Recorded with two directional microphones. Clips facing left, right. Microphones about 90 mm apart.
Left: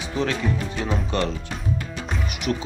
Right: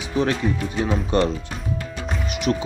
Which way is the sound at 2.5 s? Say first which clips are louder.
Right 3 dB; 40° right (ahead or behind).